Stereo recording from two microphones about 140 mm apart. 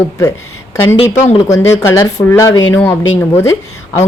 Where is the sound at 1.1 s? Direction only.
50° left (ahead or behind).